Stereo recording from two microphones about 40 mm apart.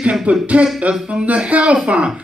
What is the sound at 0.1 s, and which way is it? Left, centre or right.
A man's voice, right.